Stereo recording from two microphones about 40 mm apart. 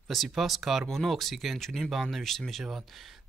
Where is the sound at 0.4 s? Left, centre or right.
Centre.